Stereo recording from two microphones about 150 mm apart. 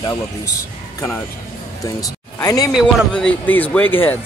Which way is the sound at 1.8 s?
25° left (ahead or behind).